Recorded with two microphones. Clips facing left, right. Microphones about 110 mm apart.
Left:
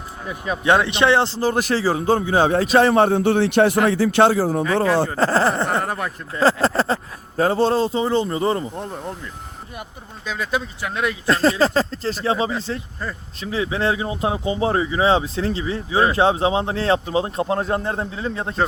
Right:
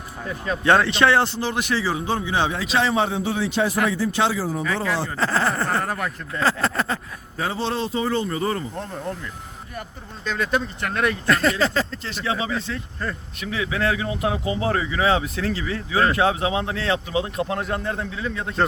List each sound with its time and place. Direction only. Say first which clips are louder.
0.3 s speech: left 1 dB; 15° left (ahead or behind)
1.4 s speech: left 4 dB; 40° left (ahead or behind)
2.7 s a man's voice: left 6 dB; 55° left (ahead or behind); by 4.2 s 70° left (ahead or behind)
4.2 s a man's voice: left 8 dB; 55° left (ahead or behind)
4.6 s speech: left 6 dB; 30° left (ahead or behind)
10.2 s speech: right 1 dB; 5° left (ahead or behind)
11.3 s speech: left 5 dB; 30° left (ahead or behind)